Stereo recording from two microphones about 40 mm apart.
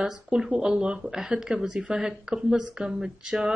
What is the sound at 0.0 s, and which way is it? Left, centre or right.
A woman's voice, centre.